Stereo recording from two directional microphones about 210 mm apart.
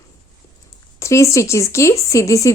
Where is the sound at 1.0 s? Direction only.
15° left (ahead or behind).